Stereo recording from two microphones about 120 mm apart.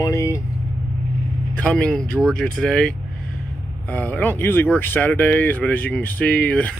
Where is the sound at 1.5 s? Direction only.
10° left (ahead or behind).